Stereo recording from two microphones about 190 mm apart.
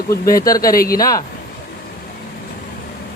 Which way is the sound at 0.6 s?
50° left (ahead or behind).